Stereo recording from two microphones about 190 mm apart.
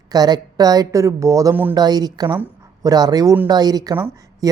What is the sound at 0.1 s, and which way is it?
A woman's voice, 20° right (ahead or behind).